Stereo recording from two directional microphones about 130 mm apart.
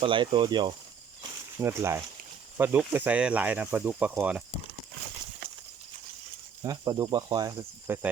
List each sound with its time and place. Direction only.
0.0 s speech: 40° right (ahead or behind)
1.5 s speech: 20° right (ahead or behind)
6.6 s speech: 30° right (ahead or behind)
7.9 s speech: 15° right (ahead or behind)